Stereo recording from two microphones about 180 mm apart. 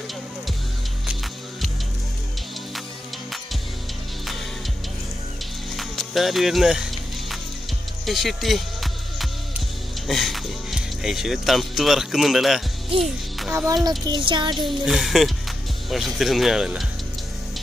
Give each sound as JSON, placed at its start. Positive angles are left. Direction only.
{"t": 5.8, "sound": "music", "side_deg": 0}
{"t": 10.0, "sound": "speech", "side_deg": 0}
{"t": 13.8, "sound": "music", "side_deg": -25}
{"t": 14.7, "sound": "speech", "side_deg": 0}